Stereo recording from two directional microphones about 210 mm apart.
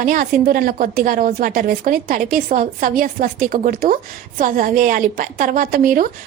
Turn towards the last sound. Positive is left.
turn(degrees=-40)  # may be behind; listen again after turning